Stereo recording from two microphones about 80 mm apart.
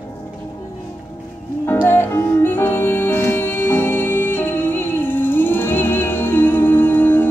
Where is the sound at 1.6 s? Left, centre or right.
Left.